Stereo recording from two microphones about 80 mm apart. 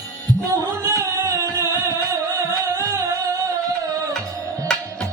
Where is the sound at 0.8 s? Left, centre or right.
Right.